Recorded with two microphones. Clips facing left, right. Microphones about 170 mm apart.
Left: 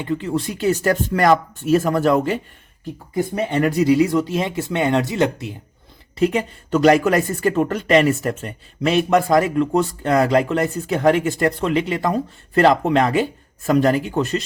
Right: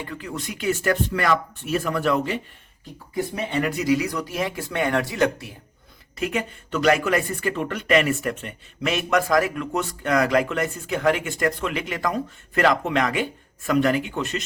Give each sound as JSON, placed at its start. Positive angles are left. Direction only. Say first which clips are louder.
{"t": 0.0, "sound": "speech", "louder": "left 10 dB", "side_deg": 25}
{"t": 6.1, "sound": "speech", "louder": "left 7 dB", "side_deg": 30}